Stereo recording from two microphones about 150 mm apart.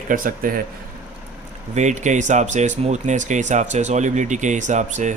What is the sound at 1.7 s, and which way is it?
Speech, 50° right (ahead or behind).